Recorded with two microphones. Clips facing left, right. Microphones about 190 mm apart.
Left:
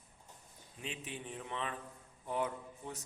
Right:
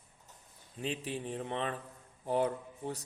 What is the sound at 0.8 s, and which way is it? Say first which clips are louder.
A man's voice: right 8 dB; 35° right (ahead or behind).